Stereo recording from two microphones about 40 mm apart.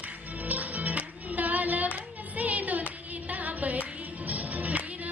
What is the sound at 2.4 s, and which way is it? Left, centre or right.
Child singing, right.